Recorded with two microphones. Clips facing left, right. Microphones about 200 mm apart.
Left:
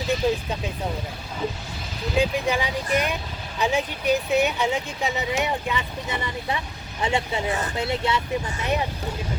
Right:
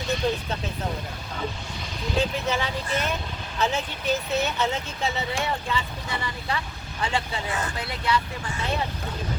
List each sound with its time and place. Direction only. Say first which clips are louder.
0.2 s speech: left 3 dB; centre (ahead or behind)
2.1 s speech: left 3 dB; 15° left (ahead or behind)